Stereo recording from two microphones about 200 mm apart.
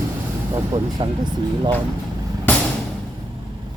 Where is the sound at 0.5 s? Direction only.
20° right (ahead or behind).